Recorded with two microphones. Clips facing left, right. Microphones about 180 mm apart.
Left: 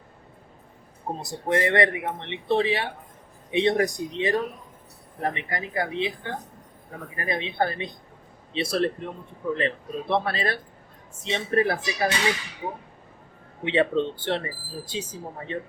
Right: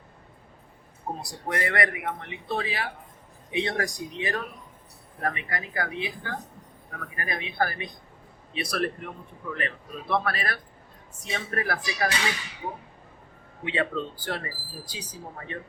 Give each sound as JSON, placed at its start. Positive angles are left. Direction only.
{"t": 1.2, "sound": "a man's voice", "side_deg": 25}
{"t": 13.7, "sound": "a man's voice", "side_deg": 25}